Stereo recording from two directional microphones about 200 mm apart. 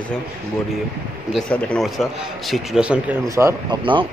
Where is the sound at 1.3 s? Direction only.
5° left (ahead or behind).